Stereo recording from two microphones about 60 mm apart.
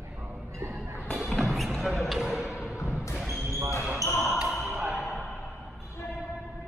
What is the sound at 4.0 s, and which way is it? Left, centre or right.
Basketball bounce, left.